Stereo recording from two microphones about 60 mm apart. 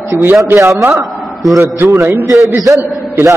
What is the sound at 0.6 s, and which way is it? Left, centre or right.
Speech, right.